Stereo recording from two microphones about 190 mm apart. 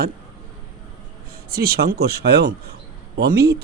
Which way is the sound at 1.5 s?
55° right (ahead or behind).